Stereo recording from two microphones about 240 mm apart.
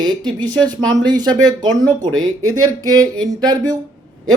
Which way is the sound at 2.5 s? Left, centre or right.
Right.